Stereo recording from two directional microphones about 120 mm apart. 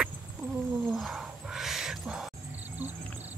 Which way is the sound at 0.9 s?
Centre (ahead or behind).